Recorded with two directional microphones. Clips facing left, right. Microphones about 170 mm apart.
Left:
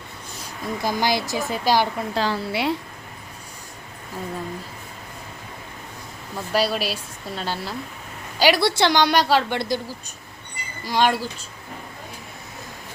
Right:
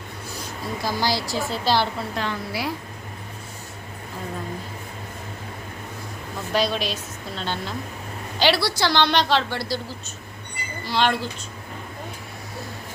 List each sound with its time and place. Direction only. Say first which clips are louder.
0.8 s a woman's voice: left 2 dB; 20° left (ahead or behind)
2.1 s a woman's voice: left 7 dB; 30° left (ahead or behind)
6.5 s a woman's voice: left 1 dB; 5° left (ahead or behind)
8.6 s a woman's voice: left 4 dB; 25° left (ahead or behind)
9.0 s a woman's voice: right 1 dB; 10° left (ahead or behind)
10.8 s a woman's voice: left 2 dB; 10° left (ahead or behind)